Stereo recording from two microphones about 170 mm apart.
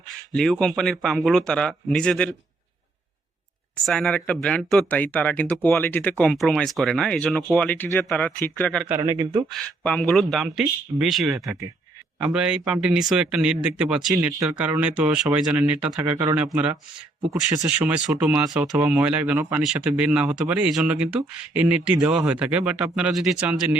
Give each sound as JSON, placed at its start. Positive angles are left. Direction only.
{"t": 0.3, "sound": "speech", "side_deg": 5}
{"t": 3.8, "sound": "speech", "side_deg": 0}
{"t": 9.0, "sound": "a man's voice", "side_deg": -20}
{"t": 9.5, "sound": "speech", "side_deg": 5}